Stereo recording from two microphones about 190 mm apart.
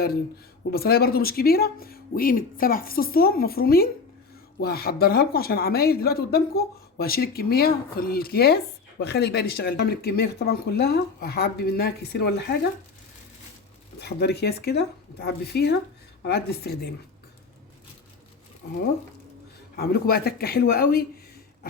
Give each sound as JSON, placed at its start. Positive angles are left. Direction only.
{"t": 0.7, "sound": "speech", "side_deg": 55}
{"t": 14.0, "sound": "speech", "side_deg": 60}
{"t": 19.7, "sound": "speech", "side_deg": 55}